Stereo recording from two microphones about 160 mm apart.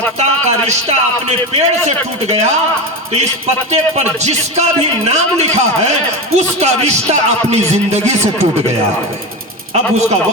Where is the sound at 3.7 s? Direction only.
45° right (ahead or behind).